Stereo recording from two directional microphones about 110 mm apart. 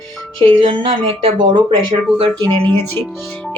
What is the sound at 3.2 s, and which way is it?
Speech, 10° left (ahead or behind).